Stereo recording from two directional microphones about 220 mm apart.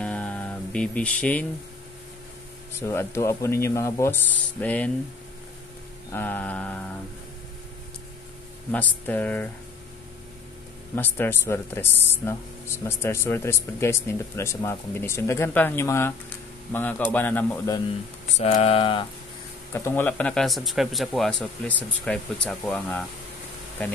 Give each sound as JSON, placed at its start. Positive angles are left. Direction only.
{"t": 0.0, "sound": "music", "side_deg": 5}
{"t": 2.7, "sound": "speech", "side_deg": 10}
{"t": 6.1, "sound": "speech", "side_deg": 10}
{"t": 8.7, "sound": "speech", "side_deg": 5}
{"t": 11.0, "sound": "speech", "side_deg": 10}
{"t": 18.3, "sound": "a sound", "side_deg": 30}
{"t": 19.7, "sound": "speech", "side_deg": 10}